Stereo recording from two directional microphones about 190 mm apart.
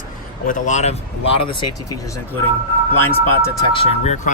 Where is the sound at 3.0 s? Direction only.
10° left (ahead or behind).